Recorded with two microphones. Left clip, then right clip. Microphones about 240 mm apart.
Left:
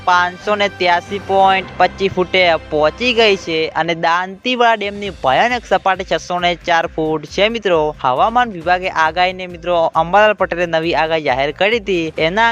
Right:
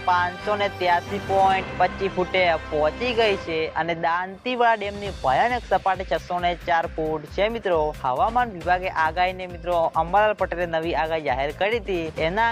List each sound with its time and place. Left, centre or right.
0.0 s speech: left